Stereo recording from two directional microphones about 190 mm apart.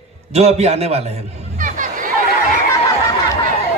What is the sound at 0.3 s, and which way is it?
Speech, 35° right (ahead or behind).